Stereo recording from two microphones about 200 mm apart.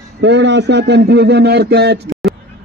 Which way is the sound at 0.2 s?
60° right (ahead or behind).